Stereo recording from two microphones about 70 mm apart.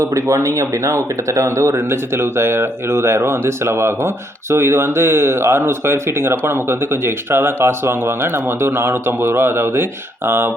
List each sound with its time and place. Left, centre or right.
0.0 s speech: right